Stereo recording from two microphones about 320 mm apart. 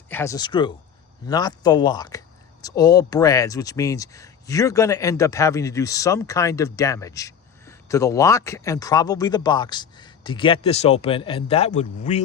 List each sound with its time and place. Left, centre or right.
0.1 s speech: centre